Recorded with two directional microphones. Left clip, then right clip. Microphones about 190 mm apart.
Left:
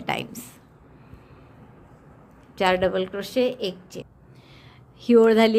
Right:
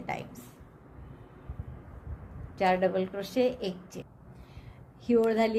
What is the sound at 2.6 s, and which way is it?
A woman's voice, 35° left (ahead or behind).